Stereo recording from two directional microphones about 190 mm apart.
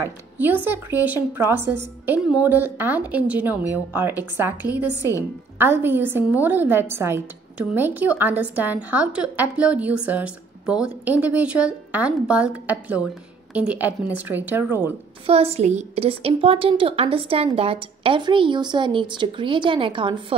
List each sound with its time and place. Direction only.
0.0 s a woman's voice: 10° right (ahead or behind)
15.2 s a woman's voice: 30° right (ahead or behind)